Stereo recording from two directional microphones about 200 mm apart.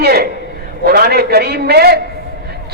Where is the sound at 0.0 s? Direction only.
55° right (ahead or behind).